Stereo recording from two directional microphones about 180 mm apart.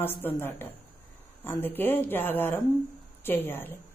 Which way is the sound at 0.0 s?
10° left (ahead or behind).